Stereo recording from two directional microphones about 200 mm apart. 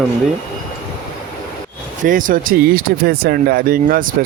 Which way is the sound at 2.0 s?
45° right (ahead or behind).